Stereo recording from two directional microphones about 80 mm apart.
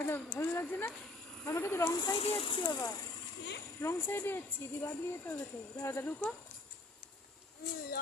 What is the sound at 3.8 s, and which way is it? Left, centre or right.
A woman's voice, left.